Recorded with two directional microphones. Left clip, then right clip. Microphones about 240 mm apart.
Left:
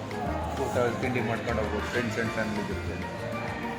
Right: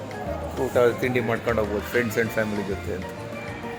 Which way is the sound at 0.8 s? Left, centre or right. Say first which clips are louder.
Right 8 dB; right.